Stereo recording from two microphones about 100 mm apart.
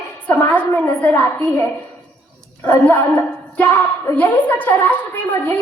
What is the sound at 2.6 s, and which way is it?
A woman's voice, 20° left (ahead or behind).